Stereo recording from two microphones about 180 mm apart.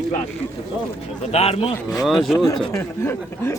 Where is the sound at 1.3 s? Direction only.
35° left (ahead or behind).